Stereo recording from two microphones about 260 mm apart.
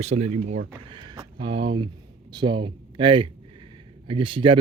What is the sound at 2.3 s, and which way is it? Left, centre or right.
Speech, centre.